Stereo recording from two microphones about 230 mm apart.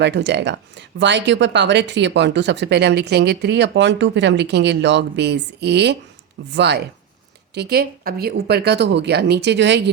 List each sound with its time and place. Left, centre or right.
0.0 s speech: right